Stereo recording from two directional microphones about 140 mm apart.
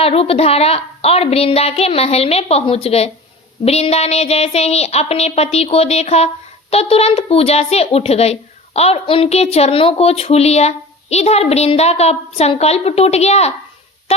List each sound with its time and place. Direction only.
0.0 s speech: 45° left (ahead or behind)